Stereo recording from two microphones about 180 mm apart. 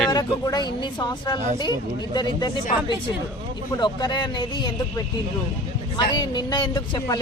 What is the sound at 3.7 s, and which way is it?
Speech, 25° left (ahead or behind).